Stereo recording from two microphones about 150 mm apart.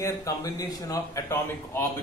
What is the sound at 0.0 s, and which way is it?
A man's voice, 20° left (ahead or behind).